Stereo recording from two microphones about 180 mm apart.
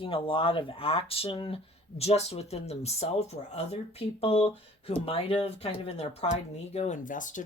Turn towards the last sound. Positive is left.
turn(degrees=45)  # may be behind; listen again after turning